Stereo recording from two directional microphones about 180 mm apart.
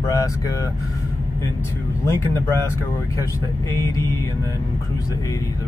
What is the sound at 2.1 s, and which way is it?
Speech, 15° left (ahead or behind).